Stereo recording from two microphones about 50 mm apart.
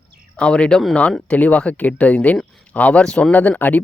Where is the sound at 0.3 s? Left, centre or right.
Left.